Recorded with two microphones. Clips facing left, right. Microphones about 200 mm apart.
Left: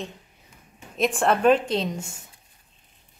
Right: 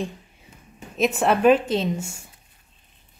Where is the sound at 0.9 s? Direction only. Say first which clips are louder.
Right 2 dB; 5° right (ahead or behind).